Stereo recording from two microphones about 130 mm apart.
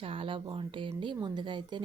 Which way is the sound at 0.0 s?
45° right (ahead or behind).